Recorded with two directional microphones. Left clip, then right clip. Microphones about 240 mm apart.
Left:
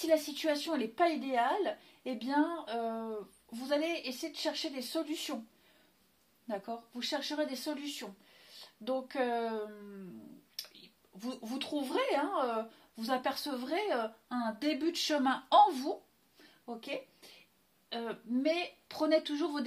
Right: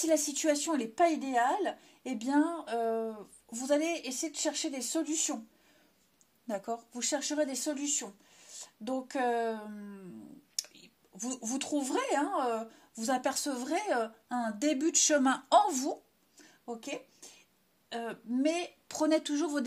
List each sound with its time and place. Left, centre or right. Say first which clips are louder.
0.0 s speech: right 1 dB; right
6.4 s speech: right 3 dB; right